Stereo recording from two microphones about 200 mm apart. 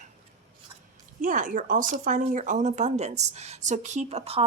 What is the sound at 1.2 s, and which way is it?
Speech, 40° right (ahead or behind).